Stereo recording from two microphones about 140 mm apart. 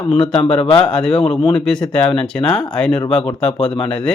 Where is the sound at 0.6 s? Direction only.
40° left (ahead or behind).